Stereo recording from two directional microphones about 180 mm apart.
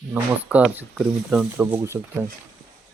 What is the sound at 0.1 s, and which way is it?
Speech, 10° right (ahead or behind).